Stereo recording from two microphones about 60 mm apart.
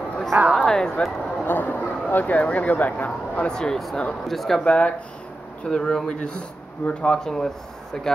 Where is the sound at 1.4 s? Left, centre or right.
Left.